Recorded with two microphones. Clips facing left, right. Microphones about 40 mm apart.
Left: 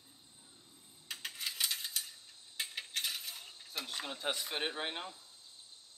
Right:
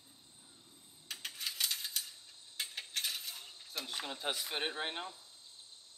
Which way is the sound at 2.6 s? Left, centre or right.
Centre.